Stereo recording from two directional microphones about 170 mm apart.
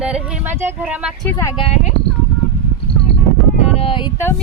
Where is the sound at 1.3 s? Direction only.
30° left (ahead or behind).